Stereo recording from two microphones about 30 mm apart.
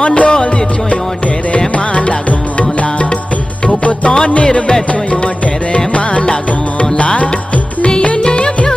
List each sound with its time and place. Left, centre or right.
0.0 s music: left
2.0 s music: left
6.8 s music: left
8.2 s music: left